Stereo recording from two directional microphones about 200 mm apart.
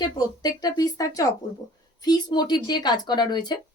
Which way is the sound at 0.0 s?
20° left (ahead or behind).